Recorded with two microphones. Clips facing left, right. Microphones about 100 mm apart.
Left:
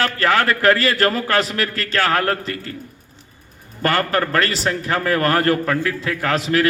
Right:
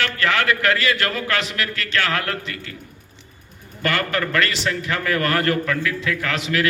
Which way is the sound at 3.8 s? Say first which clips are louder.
Left 4 dB; 40° left (ahead or behind).